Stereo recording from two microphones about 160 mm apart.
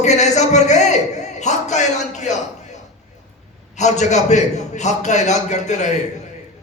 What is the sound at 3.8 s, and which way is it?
A man's voice, 45° left (ahead or behind).